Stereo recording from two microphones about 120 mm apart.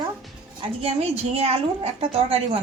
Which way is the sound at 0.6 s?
50° right (ahead or behind).